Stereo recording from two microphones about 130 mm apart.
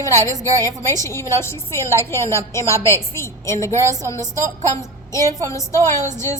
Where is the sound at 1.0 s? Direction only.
20° left (ahead or behind).